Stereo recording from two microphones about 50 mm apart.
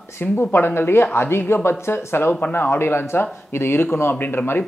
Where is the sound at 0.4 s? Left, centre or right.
Left.